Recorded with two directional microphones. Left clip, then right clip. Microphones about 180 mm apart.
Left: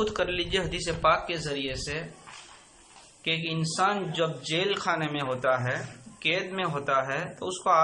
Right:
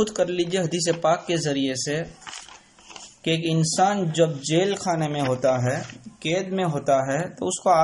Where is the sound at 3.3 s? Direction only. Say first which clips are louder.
Right 5 dB; 45° right (ahead or behind).